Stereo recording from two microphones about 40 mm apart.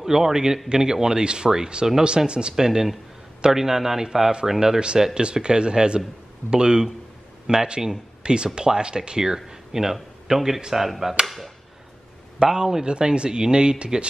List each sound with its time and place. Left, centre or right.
0.0 s speech: centre
12.4 s speech: centre
12.8 s speech: right